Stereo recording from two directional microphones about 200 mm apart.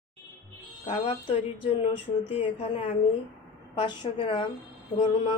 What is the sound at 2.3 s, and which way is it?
A woman's voice, 30° left (ahead or behind).